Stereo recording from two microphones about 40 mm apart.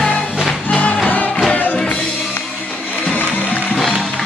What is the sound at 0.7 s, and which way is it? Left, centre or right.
Music, left.